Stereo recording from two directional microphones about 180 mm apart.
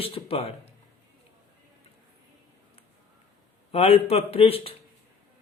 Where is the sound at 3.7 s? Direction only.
35° left (ahead or behind).